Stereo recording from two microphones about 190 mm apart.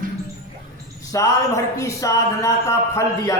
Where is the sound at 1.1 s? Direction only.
15° left (ahead or behind).